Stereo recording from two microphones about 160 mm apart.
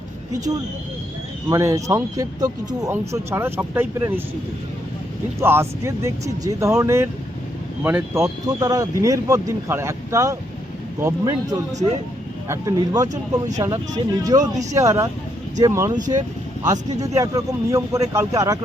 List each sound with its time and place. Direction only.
0.3 s speech: 20° right (ahead or behind)
5.4 s speech: 15° right (ahead or behind)
16.0 s speech: 50° right (ahead or behind)
17.2 s speech: 20° right (ahead or behind)